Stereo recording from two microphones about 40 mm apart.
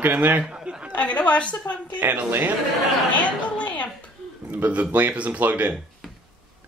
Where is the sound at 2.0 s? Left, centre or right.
Right.